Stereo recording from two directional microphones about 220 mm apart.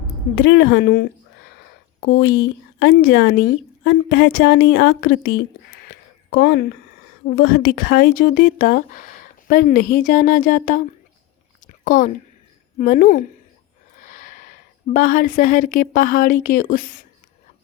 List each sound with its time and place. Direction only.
0.3 s a woman's voice: 50° left (ahead or behind)
4.9 s speech: 40° left (ahead or behind)
11.6 s a sound: 35° left (ahead or behind)
12.8 s speech: 40° left (ahead or behind)